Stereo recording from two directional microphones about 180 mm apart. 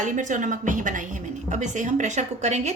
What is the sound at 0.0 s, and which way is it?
A woman's voice, 45° right (ahead or behind).